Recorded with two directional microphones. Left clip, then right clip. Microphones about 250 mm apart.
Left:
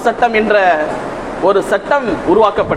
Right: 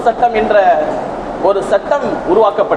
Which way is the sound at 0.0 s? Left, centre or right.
Left.